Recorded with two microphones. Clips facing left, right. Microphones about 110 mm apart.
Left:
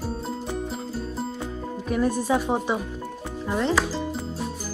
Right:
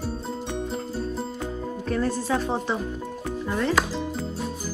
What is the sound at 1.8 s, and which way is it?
Speech, 15° left (ahead or behind).